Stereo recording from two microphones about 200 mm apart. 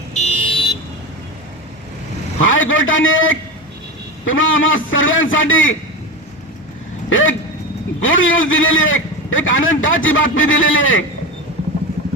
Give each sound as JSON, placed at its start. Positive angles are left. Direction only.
{"t": 0.1, "sound": "vehicle", "side_deg": 30}
{"t": 2.4, "sound": "a man's voice", "side_deg": 75}
{"t": 7.1, "sound": "a man's voice", "side_deg": 80}